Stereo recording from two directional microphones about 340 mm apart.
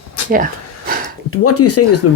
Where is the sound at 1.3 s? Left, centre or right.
Left.